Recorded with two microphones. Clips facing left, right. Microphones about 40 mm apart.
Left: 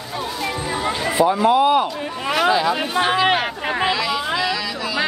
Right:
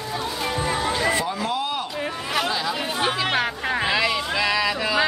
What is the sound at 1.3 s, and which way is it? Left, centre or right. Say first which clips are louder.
Speech: left 11 dB; centre.